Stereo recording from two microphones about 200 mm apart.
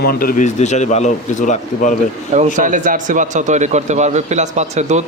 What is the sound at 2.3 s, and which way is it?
Speech, 40° right (ahead or behind).